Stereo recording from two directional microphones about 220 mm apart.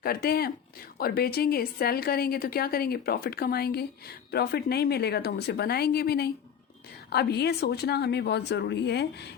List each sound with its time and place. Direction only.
0.0 s a woman's voice: 45° left (ahead or behind)